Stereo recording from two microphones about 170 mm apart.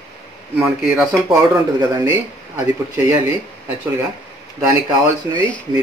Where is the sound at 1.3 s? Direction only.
20° right (ahead or behind).